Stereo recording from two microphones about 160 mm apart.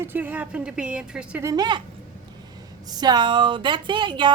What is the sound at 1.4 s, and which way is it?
A woman's voice, 25° right (ahead or behind).